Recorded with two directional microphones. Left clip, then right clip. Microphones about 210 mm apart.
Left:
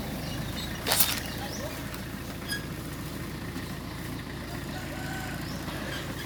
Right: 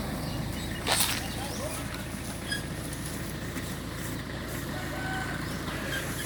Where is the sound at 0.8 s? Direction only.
40° left (ahead or behind).